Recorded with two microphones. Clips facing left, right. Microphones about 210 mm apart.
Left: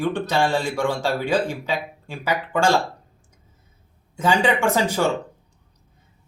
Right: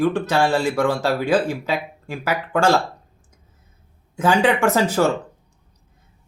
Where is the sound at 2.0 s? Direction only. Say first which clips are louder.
Right 4 dB; 10° right (ahead or behind).